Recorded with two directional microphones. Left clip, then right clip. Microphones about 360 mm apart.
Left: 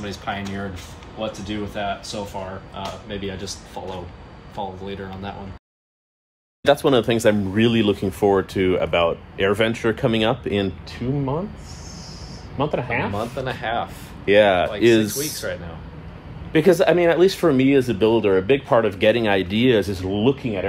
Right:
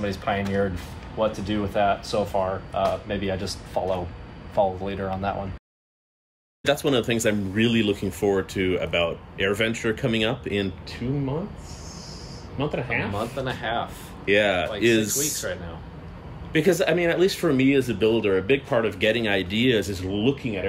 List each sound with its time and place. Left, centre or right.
0.0 s speech: centre
3.8 s speech: right
4.8 s speech: centre
6.6 s speech: centre
12.5 s speech: centre
16.5 s speech: centre